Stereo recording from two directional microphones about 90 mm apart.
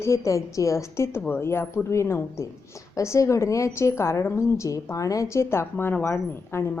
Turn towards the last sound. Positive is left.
turn(degrees=25)  # may be behind; listen again after turning